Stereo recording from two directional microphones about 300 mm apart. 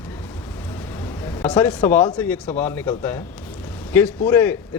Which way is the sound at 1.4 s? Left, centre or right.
Centre.